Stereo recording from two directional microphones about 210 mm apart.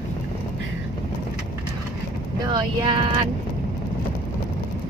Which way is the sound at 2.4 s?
20° right (ahead or behind).